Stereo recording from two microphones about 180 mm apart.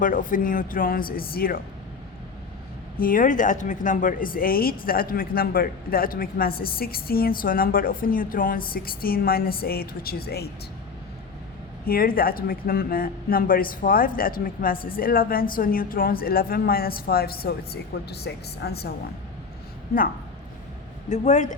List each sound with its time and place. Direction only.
0.0 s a woman's voice: 45° left (ahead or behind)
3.0 s a woman's voice: 50° left (ahead or behind)
11.9 s a woman's voice: 55° left (ahead or behind)
21.1 s speech: 40° left (ahead or behind)